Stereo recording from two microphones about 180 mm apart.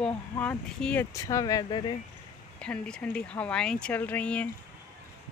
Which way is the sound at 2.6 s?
5° left (ahead or behind).